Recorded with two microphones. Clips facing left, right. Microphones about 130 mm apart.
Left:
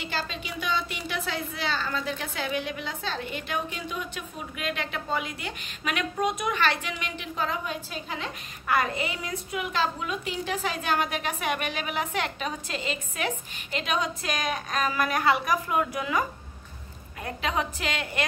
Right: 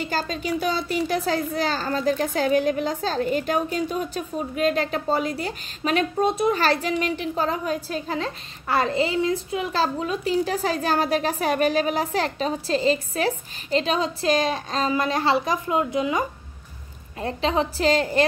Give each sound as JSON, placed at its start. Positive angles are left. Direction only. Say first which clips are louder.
{"t": 0.0, "sound": "speech", "louder": "right 7 dB", "side_deg": -40}